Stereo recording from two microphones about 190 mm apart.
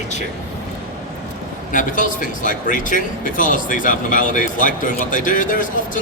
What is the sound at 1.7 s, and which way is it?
Speech, 45° left (ahead or behind).